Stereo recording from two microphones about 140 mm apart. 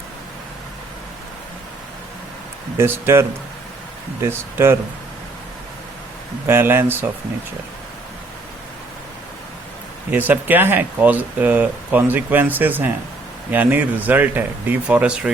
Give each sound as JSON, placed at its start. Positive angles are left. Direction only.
{"t": 2.7, "sound": "speech", "side_deg": -15}
{"t": 6.5, "sound": "speech", "side_deg": -15}
{"t": 10.1, "sound": "speech", "side_deg": -10}